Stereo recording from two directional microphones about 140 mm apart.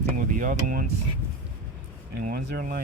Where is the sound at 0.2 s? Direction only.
75° right (ahead or behind).